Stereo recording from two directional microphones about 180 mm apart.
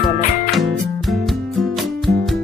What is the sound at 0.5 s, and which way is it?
Music, centre (ahead or behind).